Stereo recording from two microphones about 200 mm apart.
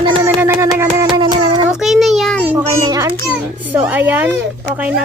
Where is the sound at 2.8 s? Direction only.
20° right (ahead or behind).